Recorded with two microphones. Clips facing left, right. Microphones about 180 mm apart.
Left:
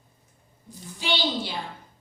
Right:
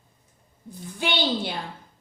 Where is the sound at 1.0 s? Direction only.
55° right (ahead or behind).